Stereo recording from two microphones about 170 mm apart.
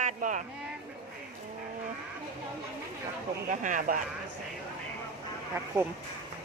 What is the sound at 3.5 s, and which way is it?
Speech, 50° right (ahead or behind).